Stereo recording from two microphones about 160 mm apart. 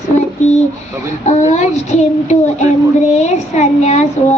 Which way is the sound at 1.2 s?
45° left (ahead or behind).